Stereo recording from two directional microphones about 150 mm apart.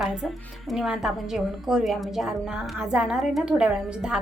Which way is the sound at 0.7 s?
Centre (ahead or behind).